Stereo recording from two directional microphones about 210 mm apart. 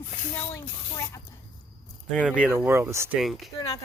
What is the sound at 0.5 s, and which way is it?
Speech, 15° left (ahead or behind).